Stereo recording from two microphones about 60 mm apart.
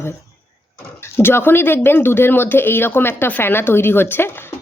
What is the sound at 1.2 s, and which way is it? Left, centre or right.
Speech, left.